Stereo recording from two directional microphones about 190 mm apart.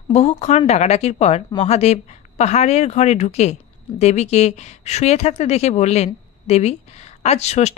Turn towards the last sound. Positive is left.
turn(degrees=35)  # may be behind; listen again after turning